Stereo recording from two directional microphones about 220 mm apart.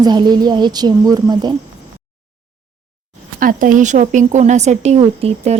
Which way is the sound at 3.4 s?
40° right (ahead or behind).